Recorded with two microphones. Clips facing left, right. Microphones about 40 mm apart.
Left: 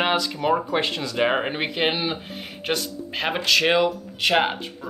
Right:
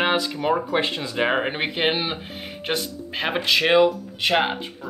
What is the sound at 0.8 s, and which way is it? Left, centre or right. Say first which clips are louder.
Speech: even; centre.